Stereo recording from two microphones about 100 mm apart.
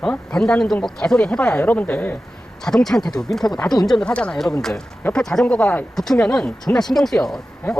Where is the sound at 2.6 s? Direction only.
5° left (ahead or behind).